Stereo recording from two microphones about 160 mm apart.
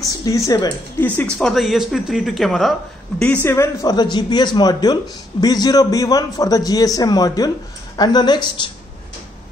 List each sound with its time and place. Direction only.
0.0 s a man's voice: 20° left (ahead or behind)
1.0 s speech: 10° left (ahead or behind)
3.4 s a man's voice: 15° left (ahead or behind)